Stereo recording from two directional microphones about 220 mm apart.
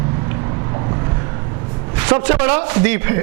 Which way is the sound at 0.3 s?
25° right (ahead or behind).